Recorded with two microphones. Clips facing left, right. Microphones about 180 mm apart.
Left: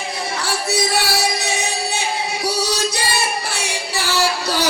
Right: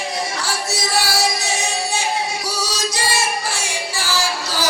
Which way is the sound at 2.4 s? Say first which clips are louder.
Left 4 dB; 60° left (ahead or behind).